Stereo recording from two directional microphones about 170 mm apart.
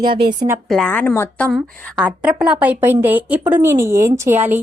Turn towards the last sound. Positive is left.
turn(degrees=-15)  # may be behind; listen again after turning